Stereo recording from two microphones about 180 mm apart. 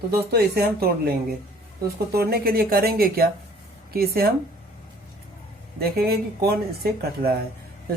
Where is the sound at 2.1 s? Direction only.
60° right (ahead or behind).